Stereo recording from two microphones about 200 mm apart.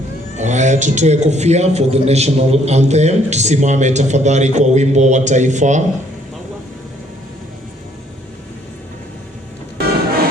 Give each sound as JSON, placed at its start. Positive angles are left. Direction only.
{"t": 0.3, "sound": "a man's voice", "side_deg": -35}